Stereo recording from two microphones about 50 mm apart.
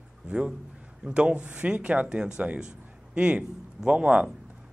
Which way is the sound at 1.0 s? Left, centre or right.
Right.